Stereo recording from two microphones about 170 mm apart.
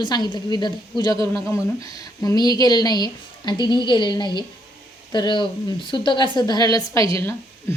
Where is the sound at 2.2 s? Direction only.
25° left (ahead or behind).